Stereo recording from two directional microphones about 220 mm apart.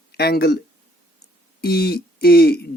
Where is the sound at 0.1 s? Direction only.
45° left (ahead or behind).